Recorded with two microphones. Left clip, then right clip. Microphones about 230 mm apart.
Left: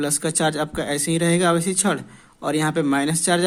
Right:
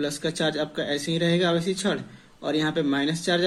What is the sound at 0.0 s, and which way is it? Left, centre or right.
Speech, left.